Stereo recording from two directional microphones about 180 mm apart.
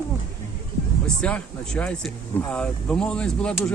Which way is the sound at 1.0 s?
5° left (ahead or behind).